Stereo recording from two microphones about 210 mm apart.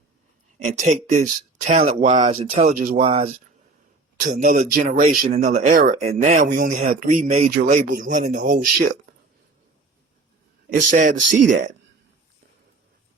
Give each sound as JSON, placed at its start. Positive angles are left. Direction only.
{"t": 0.6, "sound": "speech", "side_deg": -35}
{"t": 10.8, "sound": "speech", "side_deg": -35}